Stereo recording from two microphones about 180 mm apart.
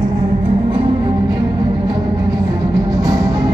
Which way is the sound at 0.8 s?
25° right (ahead or behind).